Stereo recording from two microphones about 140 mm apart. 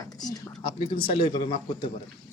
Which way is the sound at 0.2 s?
30° left (ahead or behind).